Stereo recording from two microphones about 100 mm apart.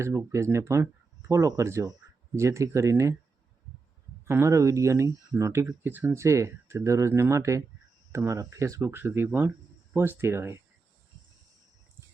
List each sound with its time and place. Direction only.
0.3 s speech: 30° right (ahead or behind)
4.3 s speech: 25° right (ahead or behind)
6.1 s speech: 30° right (ahead or behind)